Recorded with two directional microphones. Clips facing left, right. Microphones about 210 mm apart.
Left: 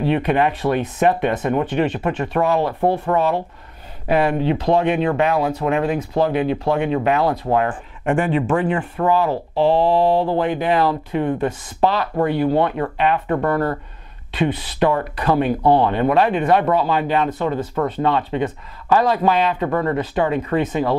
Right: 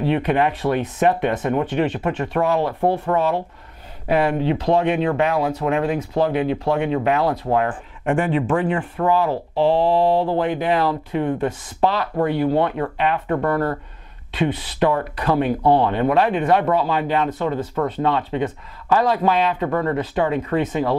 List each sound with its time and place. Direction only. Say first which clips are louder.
0.0 s speech: left 1 dB; 15° left (ahead or behind)